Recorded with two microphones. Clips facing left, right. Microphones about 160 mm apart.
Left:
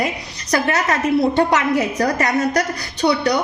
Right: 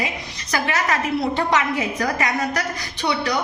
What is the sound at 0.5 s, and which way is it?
A woman's voice, 35° left (ahead or behind).